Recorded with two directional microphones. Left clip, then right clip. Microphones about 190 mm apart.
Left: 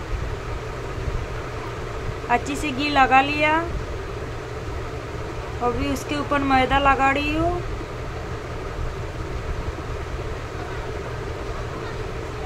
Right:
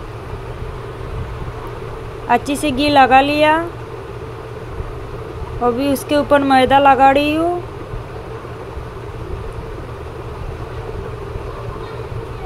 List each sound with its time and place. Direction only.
2.2 s speech: 25° right (ahead or behind)
5.8 s speech: 25° right (ahead or behind)